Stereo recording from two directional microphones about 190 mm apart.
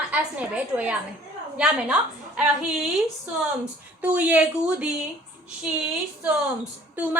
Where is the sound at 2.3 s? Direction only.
5° right (ahead or behind).